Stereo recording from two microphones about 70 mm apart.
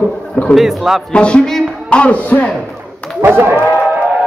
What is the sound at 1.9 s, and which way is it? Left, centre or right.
Music, centre.